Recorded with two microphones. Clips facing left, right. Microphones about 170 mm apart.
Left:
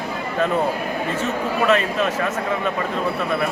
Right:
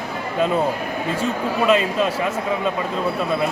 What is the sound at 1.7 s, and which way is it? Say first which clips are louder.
Speech: right 2 dB; 10° right (ahead or behind).